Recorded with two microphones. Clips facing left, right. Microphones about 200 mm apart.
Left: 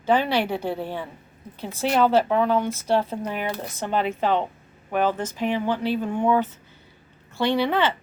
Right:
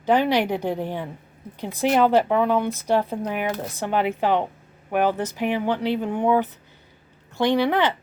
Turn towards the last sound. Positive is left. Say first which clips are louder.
# right 2 dB
turn(degrees=-15)  # may be behind; listen again after turning